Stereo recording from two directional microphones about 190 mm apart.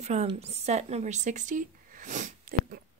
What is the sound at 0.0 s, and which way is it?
A woman's voice, 35° right (ahead or behind).